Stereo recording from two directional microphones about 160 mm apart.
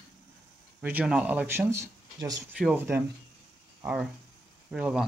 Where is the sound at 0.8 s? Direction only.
10° right (ahead or behind).